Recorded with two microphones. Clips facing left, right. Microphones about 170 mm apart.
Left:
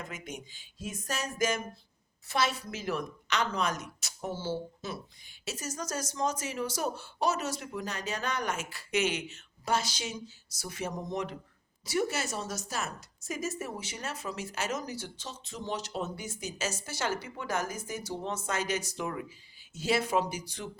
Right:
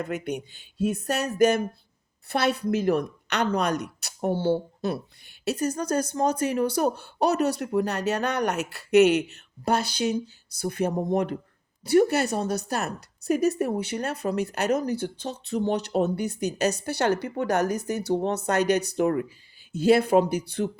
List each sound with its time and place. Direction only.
0.0 s a woman's voice: 65° right (ahead or behind)